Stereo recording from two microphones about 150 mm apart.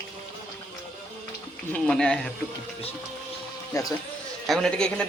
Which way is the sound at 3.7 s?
25° left (ahead or behind).